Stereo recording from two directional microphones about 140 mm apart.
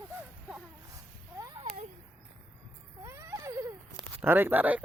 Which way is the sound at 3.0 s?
20° right (ahead or behind).